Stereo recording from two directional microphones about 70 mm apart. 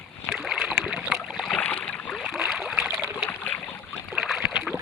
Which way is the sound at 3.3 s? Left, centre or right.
Left.